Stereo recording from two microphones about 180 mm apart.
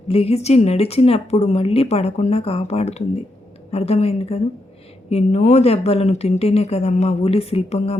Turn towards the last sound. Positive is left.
turn(degrees=35)  # may be behind; listen again after turning